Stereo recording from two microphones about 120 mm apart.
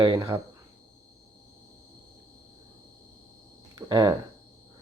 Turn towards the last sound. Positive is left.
turn(degrees=-35)  # may be behind; listen again after turning